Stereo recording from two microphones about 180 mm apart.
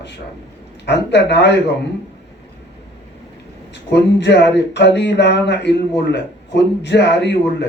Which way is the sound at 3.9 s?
75° left (ahead or behind).